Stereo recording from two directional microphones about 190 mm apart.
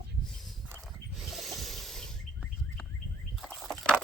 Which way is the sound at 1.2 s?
Centre (ahead or behind).